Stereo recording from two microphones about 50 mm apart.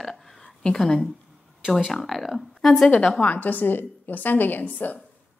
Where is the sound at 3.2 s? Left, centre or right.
Left.